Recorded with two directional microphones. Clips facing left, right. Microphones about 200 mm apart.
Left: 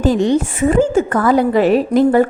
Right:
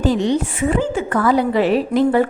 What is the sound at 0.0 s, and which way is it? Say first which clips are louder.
A woman's voice: left 3 dB; 45° left (ahead or behind).